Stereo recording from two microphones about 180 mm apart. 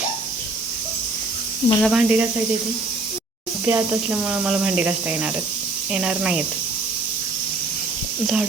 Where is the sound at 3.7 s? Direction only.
10° right (ahead or behind).